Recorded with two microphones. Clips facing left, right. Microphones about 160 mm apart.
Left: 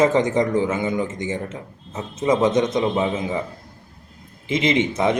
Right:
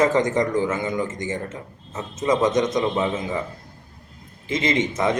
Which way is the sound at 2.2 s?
25° left (ahead or behind).